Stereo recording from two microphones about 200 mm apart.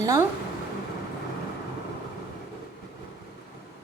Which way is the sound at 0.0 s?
15° right (ahead or behind).